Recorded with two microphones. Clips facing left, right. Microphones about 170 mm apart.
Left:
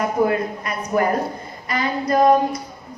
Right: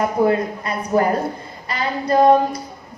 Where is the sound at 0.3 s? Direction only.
30° right (ahead or behind).